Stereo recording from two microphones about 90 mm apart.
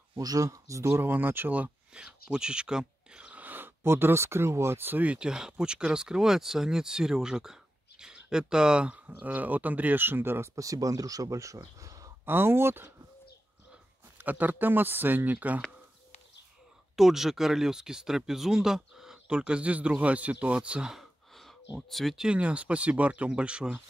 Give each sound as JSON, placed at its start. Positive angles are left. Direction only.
{"t": 0.2, "sound": "speech", "side_deg": -40}
{"t": 10.5, "sound": "speech", "side_deg": -40}
{"t": 12.3, "sound": "speech", "side_deg": -25}
{"t": 14.1, "sound": "speech", "side_deg": -20}
{"t": 16.9, "sound": "speech", "side_deg": -5}